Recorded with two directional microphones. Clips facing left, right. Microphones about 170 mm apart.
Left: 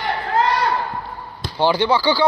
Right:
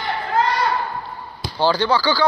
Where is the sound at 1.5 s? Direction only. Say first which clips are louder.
Left 1 dB; 20° left (ahead or behind).